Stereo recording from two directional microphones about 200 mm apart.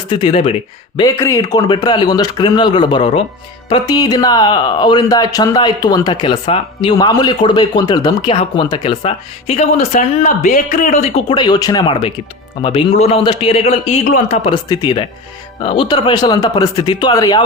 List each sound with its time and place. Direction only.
0.1 s speech: 25° left (ahead or behind)
0.9 s speech: 15° left (ahead or behind); by 11.1 s 35° left (ahead or behind)
11.3 s speech: 20° left (ahead or behind)
14.3 s speech: 25° left (ahead or behind)